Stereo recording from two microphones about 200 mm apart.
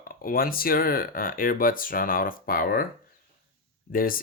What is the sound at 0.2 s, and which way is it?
Speech, 45° left (ahead or behind).